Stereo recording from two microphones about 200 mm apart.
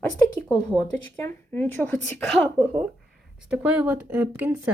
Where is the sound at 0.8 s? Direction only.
10° left (ahead or behind).